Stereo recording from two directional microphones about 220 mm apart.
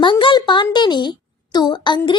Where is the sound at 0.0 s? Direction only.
20° left (ahead or behind).